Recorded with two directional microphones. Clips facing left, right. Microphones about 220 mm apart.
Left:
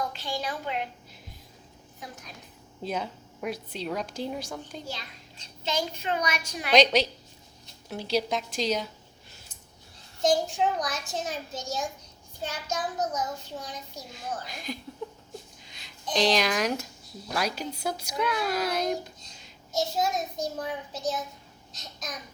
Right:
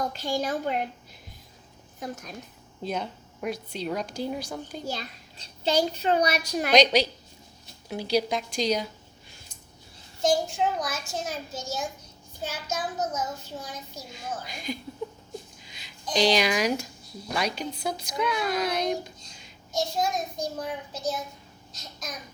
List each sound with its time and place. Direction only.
0.0 s a woman's voice: 45° right (ahead or behind)
2.0 s a woman's voice: 45° right (ahead or behind)
2.8 s a woman's voice: 5° left (ahead or behind)
4.9 s a child's voice: 40° right (ahead or behind)
6.7 s a woman's voice: centre (ahead or behind)
10.2 s a woman's voice: centre (ahead or behind)